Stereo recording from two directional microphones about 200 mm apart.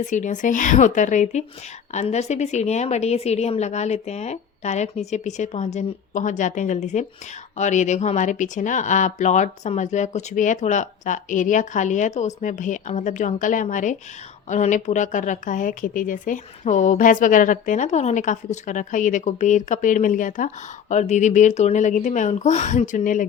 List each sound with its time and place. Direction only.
0.1 s speech: 40° left (ahead or behind)